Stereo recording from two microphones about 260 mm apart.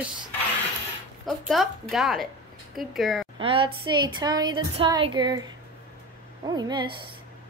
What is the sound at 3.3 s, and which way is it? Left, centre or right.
A woman's voice, centre.